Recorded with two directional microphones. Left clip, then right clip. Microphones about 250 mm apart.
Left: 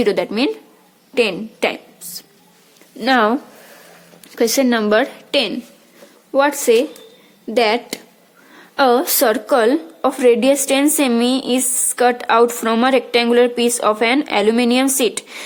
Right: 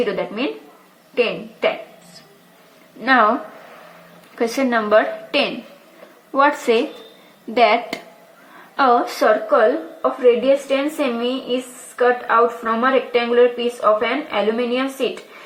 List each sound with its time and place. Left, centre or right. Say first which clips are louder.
0.0 s a woman's voice: left 4 dB; left
3.0 s a woman's voice: even; left
4.4 s a woman's voice: left 3 dB; left
6.3 s a woman's voice: left 2 dB; left